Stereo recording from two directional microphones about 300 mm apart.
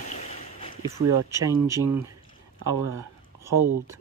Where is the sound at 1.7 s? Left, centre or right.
Centre.